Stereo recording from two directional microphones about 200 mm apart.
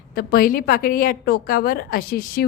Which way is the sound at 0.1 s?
50° left (ahead or behind).